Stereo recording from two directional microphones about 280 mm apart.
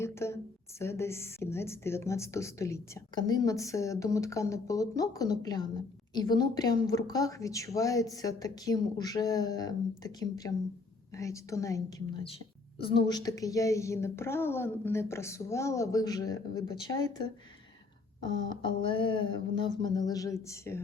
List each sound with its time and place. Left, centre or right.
0.0 s a sound: centre
0.8 s speech: centre
18.4 s speech: centre